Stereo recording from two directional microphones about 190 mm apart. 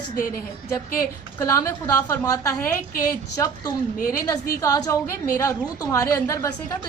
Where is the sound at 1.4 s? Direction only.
15° left (ahead or behind).